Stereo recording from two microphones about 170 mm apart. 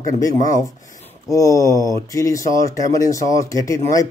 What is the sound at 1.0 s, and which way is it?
A man's voice, 20° left (ahead or behind).